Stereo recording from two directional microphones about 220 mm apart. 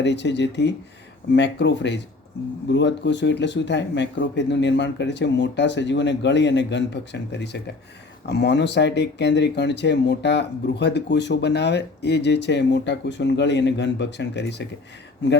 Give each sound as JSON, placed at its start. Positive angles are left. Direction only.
{"t": 0.0, "sound": "speech", "side_deg": 50}